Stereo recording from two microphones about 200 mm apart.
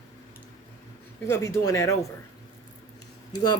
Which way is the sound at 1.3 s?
15° left (ahead or behind).